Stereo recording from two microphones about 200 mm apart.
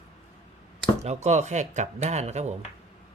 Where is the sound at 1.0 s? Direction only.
35° right (ahead or behind).